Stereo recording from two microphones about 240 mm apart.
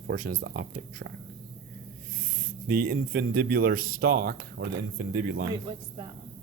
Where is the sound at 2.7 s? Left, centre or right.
Right.